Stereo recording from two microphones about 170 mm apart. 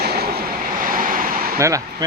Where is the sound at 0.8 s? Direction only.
55° right (ahead or behind).